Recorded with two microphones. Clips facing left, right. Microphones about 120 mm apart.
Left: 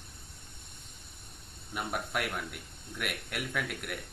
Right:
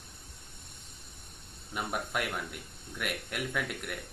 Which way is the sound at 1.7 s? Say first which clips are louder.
Even; centre (ahead or behind).